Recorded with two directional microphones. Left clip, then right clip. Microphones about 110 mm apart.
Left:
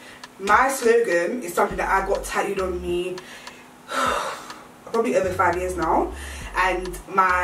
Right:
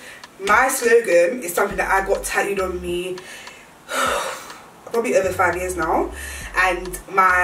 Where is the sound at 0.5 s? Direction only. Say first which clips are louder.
Right 2 dB; 5° right (ahead or behind).